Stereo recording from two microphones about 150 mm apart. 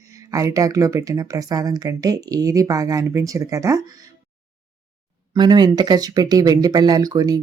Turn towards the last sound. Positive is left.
turn(degrees=-25)  # may be behind; listen again after turning